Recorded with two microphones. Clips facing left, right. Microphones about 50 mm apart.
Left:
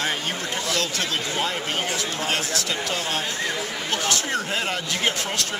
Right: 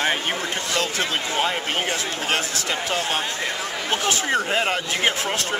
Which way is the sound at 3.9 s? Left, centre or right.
Right.